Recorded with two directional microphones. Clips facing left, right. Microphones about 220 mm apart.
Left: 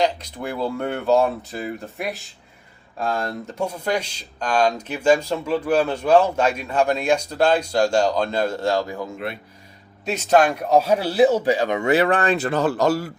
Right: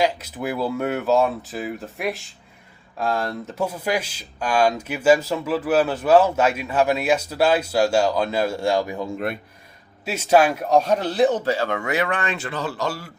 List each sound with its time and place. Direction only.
0.0 s speech: 5° right (ahead or behind)
9.1 s speech: 50° right (ahead or behind)
10.1 s speech: 10° right (ahead or behind); by 11.9 s 20° left (ahead or behind)
11.9 s speech: 35° left (ahead or behind)